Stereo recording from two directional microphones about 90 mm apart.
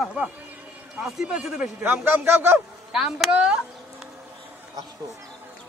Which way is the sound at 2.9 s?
5° right (ahead or behind).